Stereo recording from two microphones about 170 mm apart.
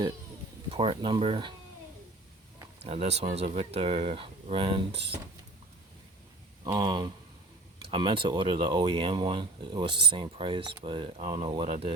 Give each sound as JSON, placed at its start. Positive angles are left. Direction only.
{"t": 0.7, "sound": "speech", "side_deg": -35}
{"t": 2.8, "sound": "speech", "side_deg": -40}
{"t": 6.7, "sound": "speech", "side_deg": -25}